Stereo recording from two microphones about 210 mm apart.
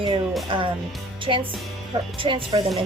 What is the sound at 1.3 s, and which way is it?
Speech, 25° right (ahead or behind).